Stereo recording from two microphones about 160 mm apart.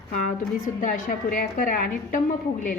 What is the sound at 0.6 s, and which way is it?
A woman's voice, 55° left (ahead or behind).